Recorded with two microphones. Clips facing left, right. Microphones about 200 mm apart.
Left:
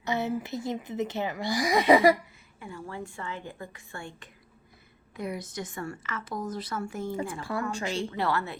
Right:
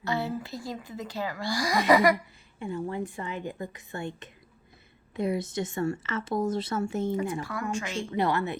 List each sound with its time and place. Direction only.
0.0 s speech: 20° left (ahead or behind)
2.6 s a woman's voice: 25° right (ahead or behind)
7.7 s speech: 35° left (ahead or behind)
8.1 s a woman's voice: 20° right (ahead or behind)